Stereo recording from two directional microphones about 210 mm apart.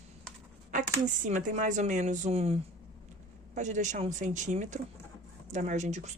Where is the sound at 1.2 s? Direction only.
35° right (ahead or behind).